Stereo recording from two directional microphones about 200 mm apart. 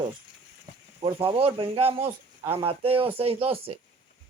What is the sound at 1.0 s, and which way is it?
Speech, 25° right (ahead or behind).